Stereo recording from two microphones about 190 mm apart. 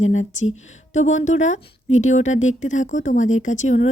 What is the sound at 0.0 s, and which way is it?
A woman's voice, 40° left (ahead or behind).